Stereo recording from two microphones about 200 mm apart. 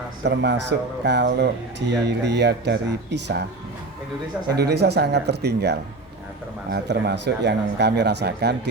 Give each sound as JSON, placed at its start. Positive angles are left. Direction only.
{"t": 0.3, "sound": "speech", "side_deg": -60}
{"t": 4.4, "sound": "speech", "side_deg": -55}